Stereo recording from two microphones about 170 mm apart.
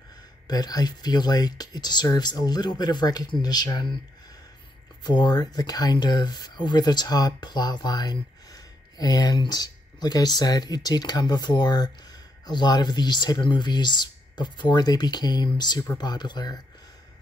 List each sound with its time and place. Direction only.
0.5 s speech: 25° left (ahead or behind)
5.0 s speech: 25° left (ahead or behind)